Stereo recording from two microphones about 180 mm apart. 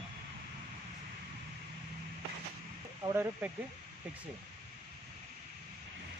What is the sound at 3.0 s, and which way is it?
Speech, 20° right (ahead or behind).